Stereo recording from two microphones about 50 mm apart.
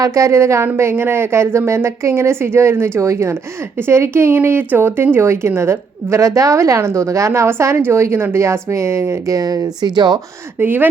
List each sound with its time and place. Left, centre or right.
0.1 s a woman's voice: right
0.8 s speech: right
3.8 s a woman's voice: right
10.6 s speech: right